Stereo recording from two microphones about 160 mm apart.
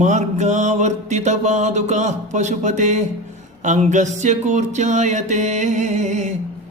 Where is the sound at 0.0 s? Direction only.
50° right (ahead or behind).